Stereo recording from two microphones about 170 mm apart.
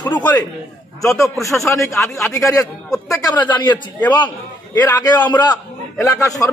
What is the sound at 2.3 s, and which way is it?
A man's voice, 20° left (ahead or behind).